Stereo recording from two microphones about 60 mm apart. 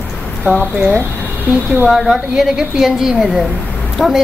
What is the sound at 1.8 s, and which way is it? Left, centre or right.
A woman's voice, centre.